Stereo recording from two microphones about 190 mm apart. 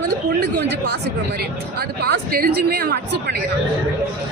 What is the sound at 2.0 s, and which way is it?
Speech, 55° right (ahead or behind).